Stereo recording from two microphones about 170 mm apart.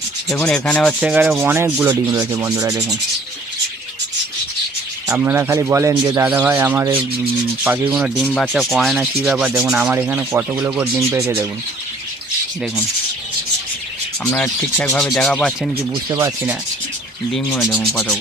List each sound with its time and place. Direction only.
0.4 s rub: 5° left (ahead or behind); by 2.0 s 15° right (ahead or behind)
2.3 s sanding: 15° right (ahead or behind)
5.0 s speech: 15° right (ahead or behind)
6.2 s speech: 10° right (ahead or behind)
8.3 s rub: centre (ahead or behind)
14.3 s rub: 10° left (ahead or behind)
16.1 s speech: 15° right (ahead or behind)
17.3 s rub: centre (ahead or behind)